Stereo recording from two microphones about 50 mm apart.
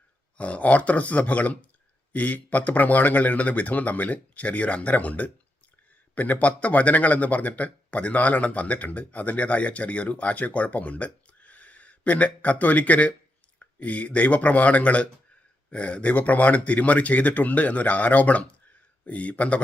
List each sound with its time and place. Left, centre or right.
0.3 s speech: left